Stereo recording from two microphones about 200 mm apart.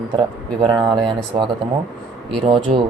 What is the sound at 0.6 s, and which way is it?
Speech, 20° right (ahead or behind).